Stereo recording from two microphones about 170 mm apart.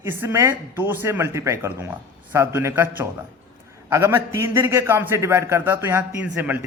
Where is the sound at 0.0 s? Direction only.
15° right (ahead or behind).